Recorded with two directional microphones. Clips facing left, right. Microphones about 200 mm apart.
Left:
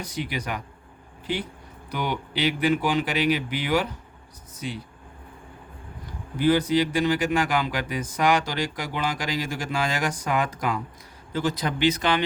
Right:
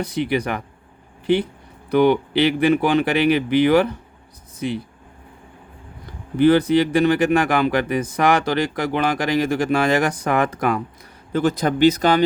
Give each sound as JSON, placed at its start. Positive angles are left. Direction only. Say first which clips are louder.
{"t": 0.0, "sound": "speech", "louder": "right 9 dB", "side_deg": -60}
{"t": 1.9, "sound": "speech", "louder": "right 13 dB", "side_deg": -60}
{"t": 6.3, "sound": "speech", "louder": "right 6 dB", "side_deg": -60}